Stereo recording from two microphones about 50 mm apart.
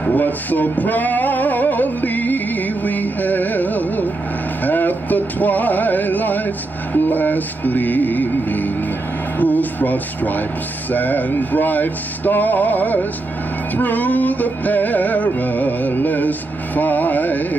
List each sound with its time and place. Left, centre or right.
0.0 s music: left
9.4 s speech: left
10.9 s music: left